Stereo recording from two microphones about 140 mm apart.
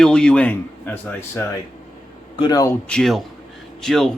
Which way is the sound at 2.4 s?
25° left (ahead or behind).